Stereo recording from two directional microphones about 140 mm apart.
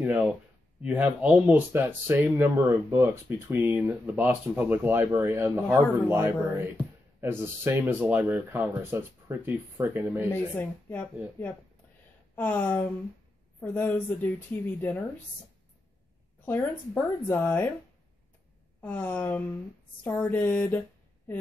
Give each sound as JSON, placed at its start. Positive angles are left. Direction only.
{"t": 0.0, "sound": "speech", "side_deg": -10}
{"t": 10.5, "sound": "speech", "side_deg": 15}
{"t": 12.4, "sound": "speech", "side_deg": 15}
{"t": 16.4, "sound": "speech", "side_deg": 15}
{"t": 18.8, "sound": "speech", "side_deg": 15}